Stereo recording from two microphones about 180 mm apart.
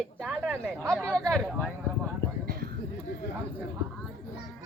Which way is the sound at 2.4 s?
60° right (ahead or behind).